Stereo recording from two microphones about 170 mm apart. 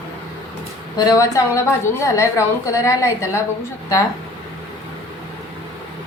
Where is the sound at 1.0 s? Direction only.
20° left (ahead or behind).